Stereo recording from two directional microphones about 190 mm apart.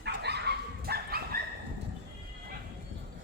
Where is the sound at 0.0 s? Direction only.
60° right (ahead or behind).